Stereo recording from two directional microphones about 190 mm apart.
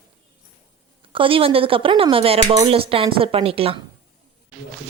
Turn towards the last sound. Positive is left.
turn(degrees=-30)  # may be behind; listen again after turning